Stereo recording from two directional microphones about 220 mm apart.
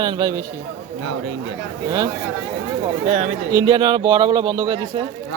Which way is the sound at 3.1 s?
35° right (ahead or behind).